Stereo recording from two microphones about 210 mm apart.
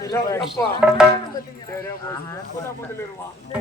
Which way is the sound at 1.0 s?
5° right (ahead or behind).